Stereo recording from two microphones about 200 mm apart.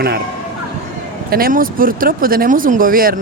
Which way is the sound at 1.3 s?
45° right (ahead or behind).